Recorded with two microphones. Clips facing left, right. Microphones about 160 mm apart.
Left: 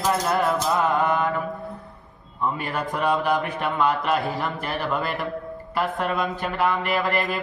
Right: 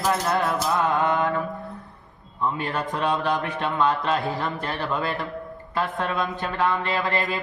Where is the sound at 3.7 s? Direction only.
Centre (ahead or behind).